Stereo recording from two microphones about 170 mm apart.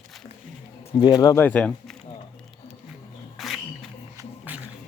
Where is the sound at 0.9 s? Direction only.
25° left (ahead or behind).